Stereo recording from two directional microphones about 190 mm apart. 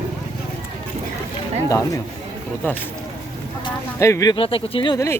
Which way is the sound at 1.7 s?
15° left (ahead or behind).